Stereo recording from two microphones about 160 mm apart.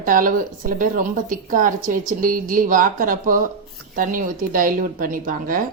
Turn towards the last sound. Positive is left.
turn(degrees=-60)  # may be behind; listen again after turning